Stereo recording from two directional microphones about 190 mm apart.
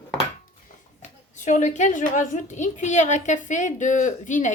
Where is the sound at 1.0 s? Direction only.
40° left (ahead or behind).